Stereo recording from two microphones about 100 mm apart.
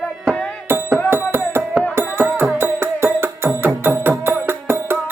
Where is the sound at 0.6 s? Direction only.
20° right (ahead or behind).